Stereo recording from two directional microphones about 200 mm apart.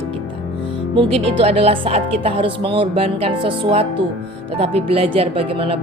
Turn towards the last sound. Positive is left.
turn(degrees=-30)  # may be behind; listen again after turning